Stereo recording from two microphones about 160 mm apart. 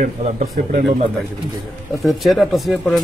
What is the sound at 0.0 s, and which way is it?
Speech, 50° right (ahead or behind).